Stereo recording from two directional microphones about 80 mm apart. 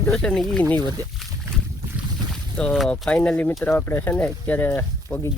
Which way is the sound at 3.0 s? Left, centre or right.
Centre.